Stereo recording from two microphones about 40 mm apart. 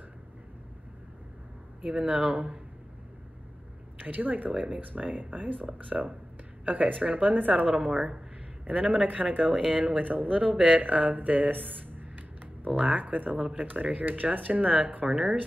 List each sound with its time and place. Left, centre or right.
1.8 s speech: right
4.0 s speech: right
7.9 s speech: centre
8.6 s speech: right
10.4 s speech: right
10.8 s speech: right
15.0 s speech: centre